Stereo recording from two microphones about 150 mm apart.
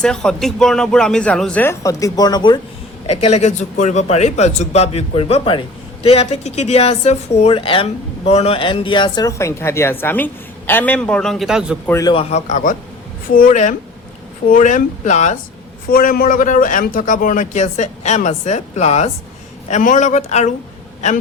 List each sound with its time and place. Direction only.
0.0 s speech: 5° left (ahead or behind)
1.8 s speech: 20° left (ahead or behind)
3.2 s speech: 50° left (ahead or behind); by 11.8 s 5° right (ahead or behind)
11.9 s speech: 20° left (ahead or behind)
12.1 s a man's voice: 45° left (ahead or behind)
15.9 s a man's voice: 75° left (ahead or behind); by 20.5 s 50° left (ahead or behind)